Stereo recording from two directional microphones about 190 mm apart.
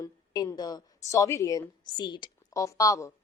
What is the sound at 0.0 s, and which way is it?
A woman's voice, 20° left (ahead or behind).